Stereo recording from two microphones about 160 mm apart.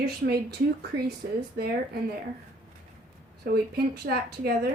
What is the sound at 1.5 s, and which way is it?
Speech, 80° right.